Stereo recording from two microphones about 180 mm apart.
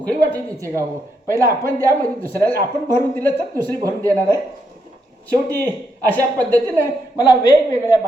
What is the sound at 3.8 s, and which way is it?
Speech, 20° right (ahead or behind).